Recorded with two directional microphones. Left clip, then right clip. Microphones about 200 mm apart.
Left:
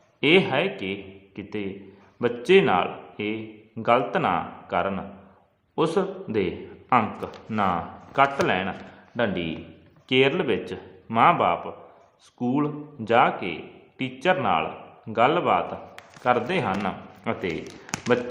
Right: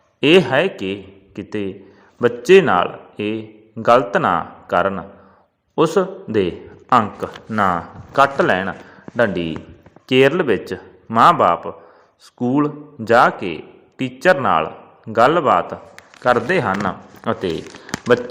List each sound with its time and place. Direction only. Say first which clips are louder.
0.2 s a man's voice: right 7 dB; 30° right (ahead or behind)